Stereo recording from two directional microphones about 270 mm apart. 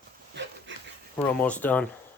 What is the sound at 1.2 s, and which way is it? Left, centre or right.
Speech, centre.